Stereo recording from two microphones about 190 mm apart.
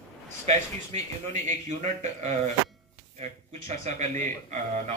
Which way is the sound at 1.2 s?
40° right (ahead or behind).